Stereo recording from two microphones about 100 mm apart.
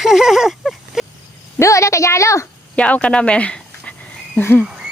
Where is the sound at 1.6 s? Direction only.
30° left (ahead or behind).